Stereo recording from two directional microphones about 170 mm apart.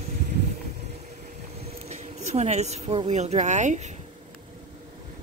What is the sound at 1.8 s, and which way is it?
Speech, 40° right (ahead or behind).